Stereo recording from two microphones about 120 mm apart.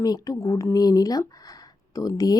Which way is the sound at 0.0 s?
30° left (ahead or behind).